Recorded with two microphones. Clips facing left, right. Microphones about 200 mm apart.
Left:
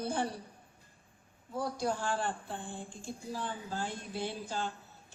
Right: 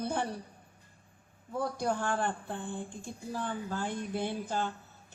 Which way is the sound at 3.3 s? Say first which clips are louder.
Right 4 dB; 55° right (ahead or behind).